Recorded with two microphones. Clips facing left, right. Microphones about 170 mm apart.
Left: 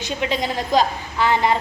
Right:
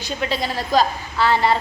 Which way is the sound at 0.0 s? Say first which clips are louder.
Left 1 dB; 15° left (ahead or behind).